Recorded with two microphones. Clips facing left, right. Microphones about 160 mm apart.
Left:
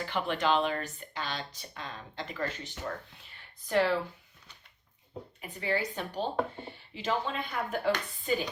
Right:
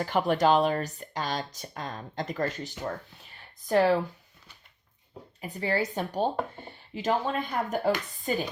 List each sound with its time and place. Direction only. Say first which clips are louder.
0.0 s a woman's voice: right 7 dB; 40° right (ahead or behind)
5.4 s a woman's voice: right 4 dB; 40° right (ahead or behind)